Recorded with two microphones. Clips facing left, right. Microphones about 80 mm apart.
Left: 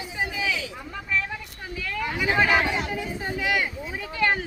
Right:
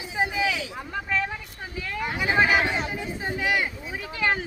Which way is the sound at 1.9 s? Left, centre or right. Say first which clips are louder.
Left 1 dB; centre.